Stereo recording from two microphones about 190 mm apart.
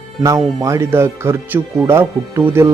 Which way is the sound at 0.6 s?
15° right (ahead or behind).